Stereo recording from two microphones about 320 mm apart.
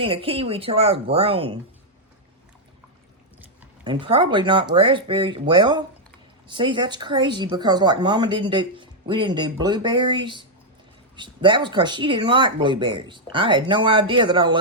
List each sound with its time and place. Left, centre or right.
0.0 s speech: centre
3.8 s speech: centre